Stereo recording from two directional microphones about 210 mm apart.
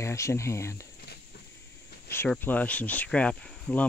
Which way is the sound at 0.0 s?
15° left (ahead or behind).